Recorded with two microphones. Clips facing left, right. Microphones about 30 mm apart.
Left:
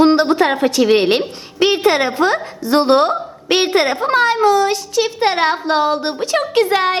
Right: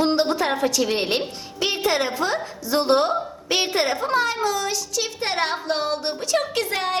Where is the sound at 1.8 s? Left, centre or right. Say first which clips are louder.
Left 8 dB; left.